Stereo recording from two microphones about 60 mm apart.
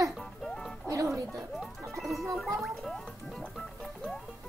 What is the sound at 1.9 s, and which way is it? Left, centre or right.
Music, centre.